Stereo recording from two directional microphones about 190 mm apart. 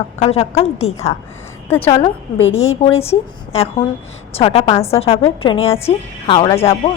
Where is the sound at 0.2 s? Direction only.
35° left (ahead or behind).